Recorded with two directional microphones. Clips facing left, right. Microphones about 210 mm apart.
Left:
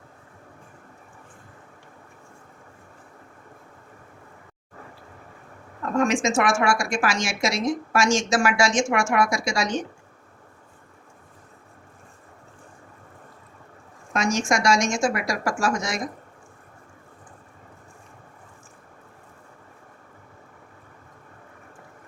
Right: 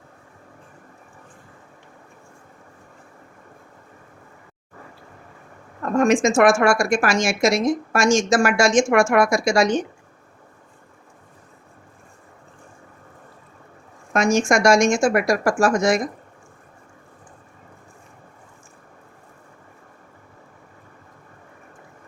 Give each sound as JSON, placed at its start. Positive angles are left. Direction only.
{"t": 6.0, "sound": "a woman's voice", "side_deg": -50}
{"t": 14.1, "sound": "a woman's voice", "side_deg": -55}